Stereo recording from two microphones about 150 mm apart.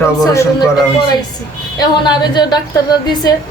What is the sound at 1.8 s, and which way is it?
Speech, 30° left (ahead or behind).